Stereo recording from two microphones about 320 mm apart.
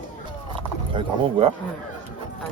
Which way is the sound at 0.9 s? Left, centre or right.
Centre.